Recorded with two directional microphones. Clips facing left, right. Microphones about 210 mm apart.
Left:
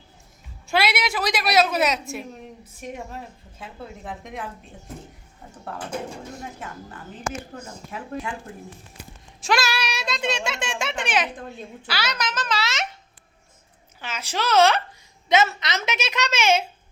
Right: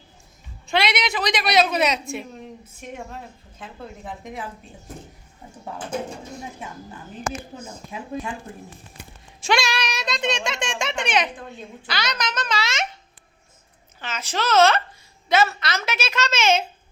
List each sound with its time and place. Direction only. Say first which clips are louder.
0.7 s a woman's voice: even; 5° left (ahead or behind)
3.6 s a woman's voice: even; 5° left (ahead or behind)
7.9 s speech: right 1 dB; 20° right (ahead or behind)
9.4 s a child's voice: right 1 dB; centre (ahead or behind)
14.0 s a woman's voice: right 1 dB; 10° left (ahead or behind)